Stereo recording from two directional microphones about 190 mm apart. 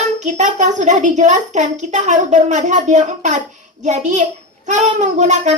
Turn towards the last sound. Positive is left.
turn(degrees=-40)  # may be behind; listen again after turning